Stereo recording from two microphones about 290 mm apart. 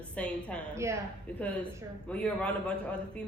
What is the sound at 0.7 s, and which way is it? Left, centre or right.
Speech, centre.